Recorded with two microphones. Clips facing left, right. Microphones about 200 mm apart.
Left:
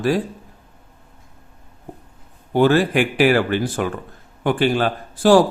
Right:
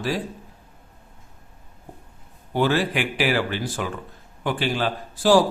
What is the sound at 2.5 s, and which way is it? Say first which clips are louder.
A man's voice: left 6 dB; 50° left (ahead or behind).